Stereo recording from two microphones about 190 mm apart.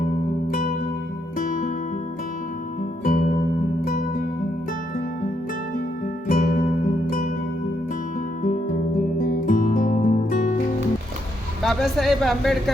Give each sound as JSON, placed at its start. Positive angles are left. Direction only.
{"t": 1.4, "sound": "music", "side_deg": 45}
{"t": 3.0, "sound": "music", "side_deg": 45}
{"t": 6.2, "sound": "music", "side_deg": 45}
{"t": 8.4, "sound": "music", "side_deg": 40}
{"t": 11.6, "sound": "speech", "side_deg": 0}